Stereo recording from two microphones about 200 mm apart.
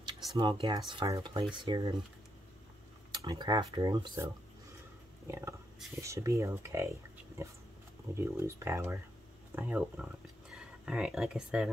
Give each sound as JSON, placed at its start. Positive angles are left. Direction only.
{"t": 0.3, "sound": "speech", "side_deg": -20}
{"t": 3.1, "sound": "speech", "side_deg": -20}
{"t": 8.1, "sound": "speech", "side_deg": -15}